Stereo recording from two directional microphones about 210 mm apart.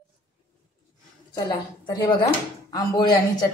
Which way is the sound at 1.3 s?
20° left (ahead or behind).